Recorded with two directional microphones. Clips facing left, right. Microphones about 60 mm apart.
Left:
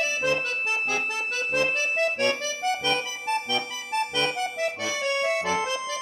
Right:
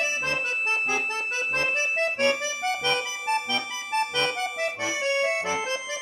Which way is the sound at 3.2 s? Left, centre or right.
Centre.